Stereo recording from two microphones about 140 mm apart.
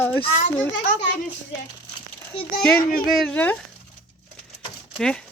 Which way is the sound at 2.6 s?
5° left (ahead or behind).